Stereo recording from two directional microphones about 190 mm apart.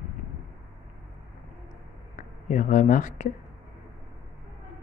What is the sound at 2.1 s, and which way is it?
Speech, 40° left (ahead or behind).